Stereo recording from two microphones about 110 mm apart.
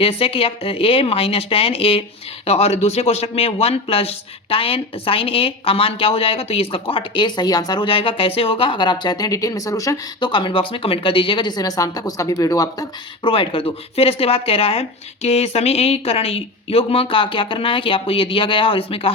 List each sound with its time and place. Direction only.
0.0 s speech: 60° left (ahead or behind)
2.5 s speech: 70° left (ahead or behind); by 10.0 s 30° left (ahead or behind)
10.2 s speech: 45° left (ahead or behind)
13.2 s speech: 50° left (ahead or behind)